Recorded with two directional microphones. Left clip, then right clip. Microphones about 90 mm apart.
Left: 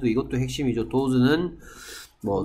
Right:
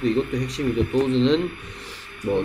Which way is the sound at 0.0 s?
20° left (ahead or behind).